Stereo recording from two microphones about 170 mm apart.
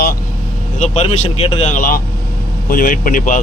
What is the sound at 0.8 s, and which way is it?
Speech, 40° left (ahead or behind).